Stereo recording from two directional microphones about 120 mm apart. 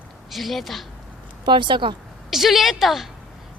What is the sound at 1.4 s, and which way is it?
Speech, 40° right (ahead or behind).